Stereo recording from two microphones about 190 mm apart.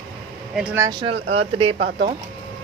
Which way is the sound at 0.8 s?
20° right (ahead or behind).